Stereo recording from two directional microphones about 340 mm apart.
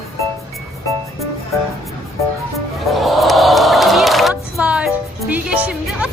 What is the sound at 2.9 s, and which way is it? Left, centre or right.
Crowd, centre.